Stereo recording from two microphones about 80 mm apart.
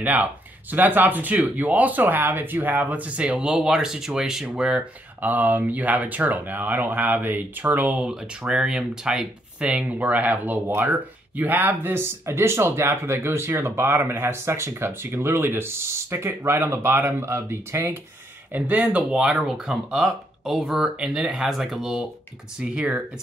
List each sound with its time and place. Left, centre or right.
0.0 s speech: right
18.5 s speech: centre